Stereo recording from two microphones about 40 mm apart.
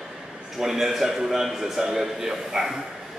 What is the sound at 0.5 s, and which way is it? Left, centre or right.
A man's voice, centre.